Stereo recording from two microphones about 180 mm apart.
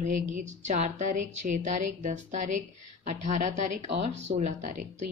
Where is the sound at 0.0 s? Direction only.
45° right (ahead or behind).